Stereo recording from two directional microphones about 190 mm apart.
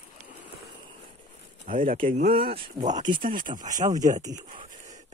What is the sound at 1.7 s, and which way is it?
Speech, 45° right (ahead or behind).